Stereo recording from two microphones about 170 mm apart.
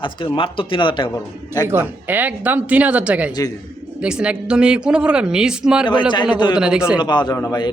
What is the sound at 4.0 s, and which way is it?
Speech, 5° right (ahead or behind).